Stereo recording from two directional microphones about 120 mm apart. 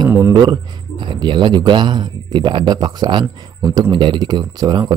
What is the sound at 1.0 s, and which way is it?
A man's voice, 40° right (ahead or behind).